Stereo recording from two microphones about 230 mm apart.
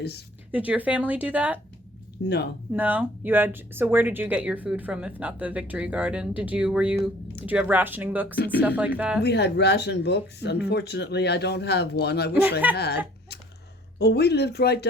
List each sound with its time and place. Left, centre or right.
0.5 s speech: centre
2.7 s speech: centre
9.2 s speech: left
14.0 s speech: left